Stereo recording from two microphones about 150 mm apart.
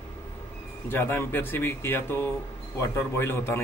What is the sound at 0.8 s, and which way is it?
Speech, 15° left (ahead or behind).